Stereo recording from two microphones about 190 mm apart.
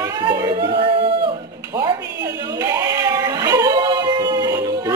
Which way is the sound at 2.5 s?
20° right (ahead or behind).